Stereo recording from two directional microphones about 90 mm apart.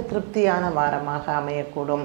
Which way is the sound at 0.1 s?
15° right (ahead or behind).